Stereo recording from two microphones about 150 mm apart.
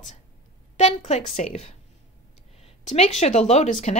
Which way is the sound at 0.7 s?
50° left (ahead or behind).